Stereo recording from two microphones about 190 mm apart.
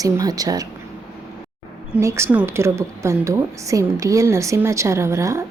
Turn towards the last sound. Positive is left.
turn(degrees=-15)  # may be behind; listen again after turning